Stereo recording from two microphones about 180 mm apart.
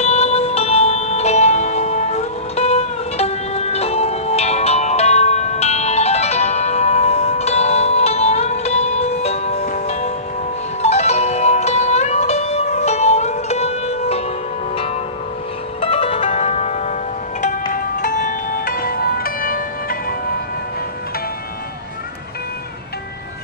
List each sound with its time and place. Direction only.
0.0 s music: 35° left (ahead or behind)
15.8 s music: 30° left (ahead or behind)
18.0 s music: 45° left (ahead or behind)